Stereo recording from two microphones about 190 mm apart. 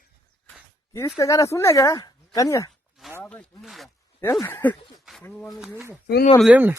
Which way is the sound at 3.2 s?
5° left (ahead or behind).